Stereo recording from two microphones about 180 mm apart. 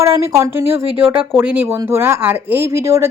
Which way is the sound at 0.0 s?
15° right (ahead or behind).